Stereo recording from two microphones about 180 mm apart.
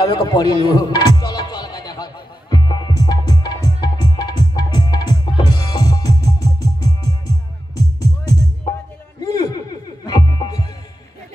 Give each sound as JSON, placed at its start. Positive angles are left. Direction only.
{"t": 0.0, "sound": "speech", "side_deg": 20}
{"t": 2.5, "sound": "music", "side_deg": 25}